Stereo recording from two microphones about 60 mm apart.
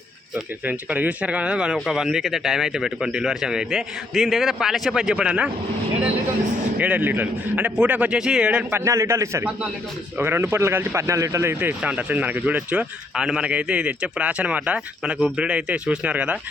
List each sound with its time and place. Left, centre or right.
0.6 s speech: right
6.7 s speech: right
8.2 s speech: centre
8.7 s a man's voice: right
10.2 s a man's voice: right
11.8 s speech: right